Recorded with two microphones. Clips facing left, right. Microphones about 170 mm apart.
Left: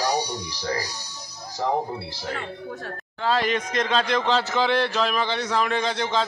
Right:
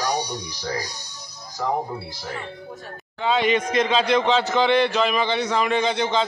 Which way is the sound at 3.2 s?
Centre (ahead or behind).